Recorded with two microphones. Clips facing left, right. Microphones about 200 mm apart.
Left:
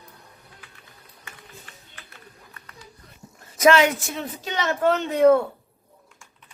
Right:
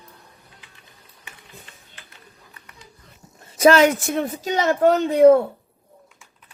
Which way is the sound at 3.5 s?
35° right (ahead or behind).